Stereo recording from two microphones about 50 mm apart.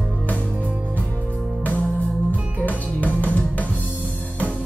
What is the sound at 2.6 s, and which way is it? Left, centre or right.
Music, left.